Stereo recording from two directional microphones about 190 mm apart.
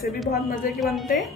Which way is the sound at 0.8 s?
Centre (ahead or behind).